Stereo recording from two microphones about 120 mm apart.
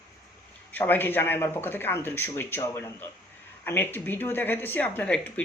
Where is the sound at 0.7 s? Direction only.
15° left (ahead or behind).